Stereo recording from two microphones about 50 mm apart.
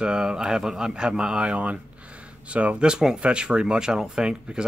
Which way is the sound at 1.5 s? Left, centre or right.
Right.